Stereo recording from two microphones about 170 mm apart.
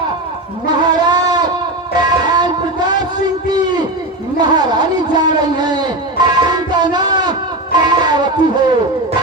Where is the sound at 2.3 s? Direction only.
25° right (ahead or behind).